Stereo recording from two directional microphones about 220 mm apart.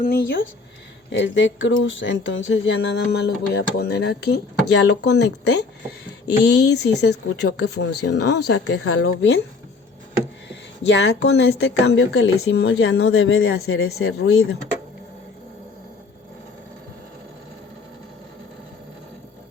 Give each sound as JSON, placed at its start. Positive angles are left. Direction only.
{"t": 0.0, "sound": "speech", "side_deg": 45}
{"t": 1.2, "sound": "speech", "side_deg": 60}
{"t": 7.0, "sound": "speech", "side_deg": 90}
{"t": 7.6, "sound": "speech", "side_deg": 50}
{"t": 8.6, "sound": "speech", "side_deg": 85}
{"t": 9.0, "sound": "speech", "side_deg": 50}
{"t": 10.8, "sound": "speech", "side_deg": 60}